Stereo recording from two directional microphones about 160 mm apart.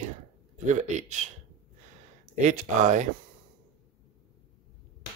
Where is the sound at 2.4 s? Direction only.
50° right (ahead or behind).